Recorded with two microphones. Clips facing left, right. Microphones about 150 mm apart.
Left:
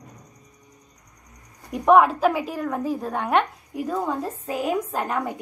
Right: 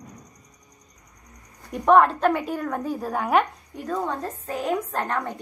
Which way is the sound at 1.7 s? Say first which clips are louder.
Left 1 dB; 5° left (ahead or behind).